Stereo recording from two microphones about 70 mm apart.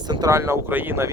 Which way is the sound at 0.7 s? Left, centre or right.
Right.